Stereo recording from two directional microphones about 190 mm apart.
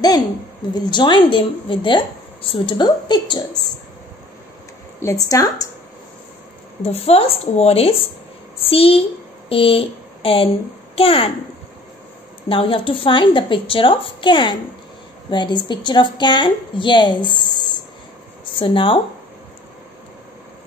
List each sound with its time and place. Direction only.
0.7 s a woman's voice: 25° left (ahead or behind)
5.0 s speech: 20° left (ahead or behind)
6.8 s a woman's voice: 30° left (ahead or behind)
12.4 s a woman's voice: 25° left (ahead or behind)